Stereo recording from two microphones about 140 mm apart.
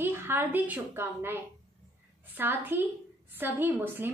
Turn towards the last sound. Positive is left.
turn(degrees=-15)  # may be behind; listen again after turning